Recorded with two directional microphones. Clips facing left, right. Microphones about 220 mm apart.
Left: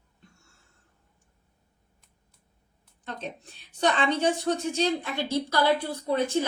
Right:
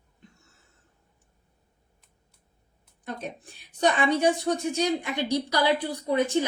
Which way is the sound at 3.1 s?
10° right (ahead or behind).